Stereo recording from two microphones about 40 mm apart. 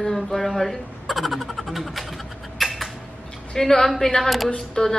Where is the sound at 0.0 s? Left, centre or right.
Centre.